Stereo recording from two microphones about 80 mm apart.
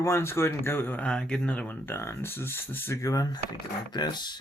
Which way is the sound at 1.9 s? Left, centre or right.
Left.